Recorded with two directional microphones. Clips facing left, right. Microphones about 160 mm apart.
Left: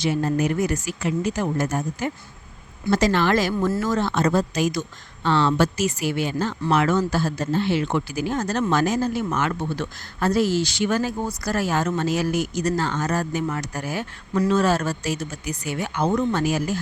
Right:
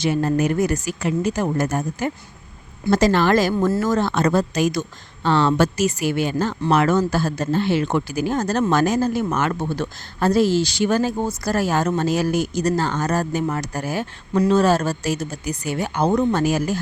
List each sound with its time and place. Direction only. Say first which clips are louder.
0.0 s a woman's voice: right 2 dB; 55° right (ahead or behind)